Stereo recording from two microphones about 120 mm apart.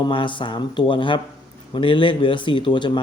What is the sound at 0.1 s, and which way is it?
Speech, 45° left (ahead or behind).